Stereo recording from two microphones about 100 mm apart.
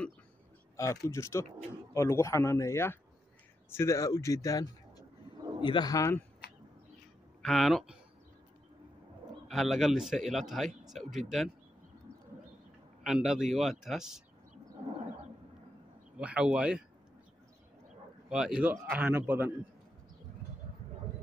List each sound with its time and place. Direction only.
0.7 s speech: 30° left (ahead or behind)
5.6 s speech: 50° left (ahead or behind)
7.4 s speech: centre (ahead or behind)
9.5 s speech: centre (ahead or behind)
13.0 s speech: 5° right (ahead or behind)
16.2 s speech: 10° right (ahead or behind)
18.3 s a man's voice: 10° right (ahead or behind)